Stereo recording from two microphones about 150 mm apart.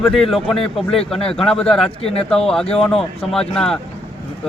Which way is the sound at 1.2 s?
40° left (ahead or behind).